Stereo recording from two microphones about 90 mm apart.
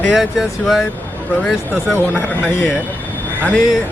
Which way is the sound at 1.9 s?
20° left (ahead or behind).